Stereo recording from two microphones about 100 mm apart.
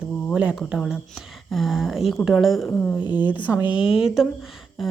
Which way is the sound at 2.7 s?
15° left (ahead or behind).